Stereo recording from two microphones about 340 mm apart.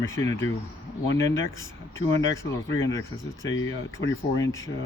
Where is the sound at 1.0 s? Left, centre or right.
Left.